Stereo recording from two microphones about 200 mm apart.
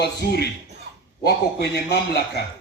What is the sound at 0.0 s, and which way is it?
A man's voice, 55° left (ahead or behind).